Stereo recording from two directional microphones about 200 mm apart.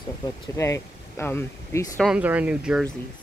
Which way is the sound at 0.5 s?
15° left (ahead or behind).